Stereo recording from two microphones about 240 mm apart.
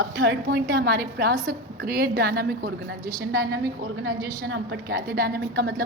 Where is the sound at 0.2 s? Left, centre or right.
Right.